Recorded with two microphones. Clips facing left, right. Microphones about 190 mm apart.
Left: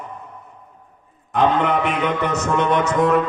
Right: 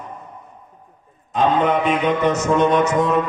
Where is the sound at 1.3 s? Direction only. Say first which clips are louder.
Right 1 dB; 60° left (ahead or behind).